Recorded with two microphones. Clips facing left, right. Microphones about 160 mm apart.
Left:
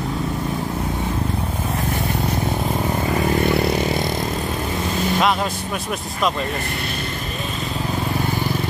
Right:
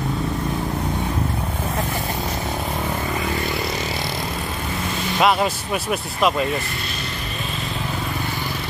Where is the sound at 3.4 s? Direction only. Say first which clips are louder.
Left 7 dB; 55° left (ahead or behind).